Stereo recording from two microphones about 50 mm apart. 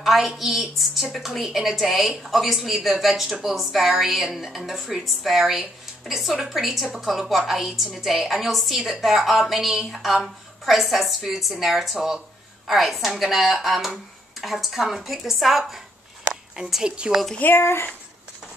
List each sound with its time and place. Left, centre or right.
0.0 s a woman's voice: centre
17.6 s speech: left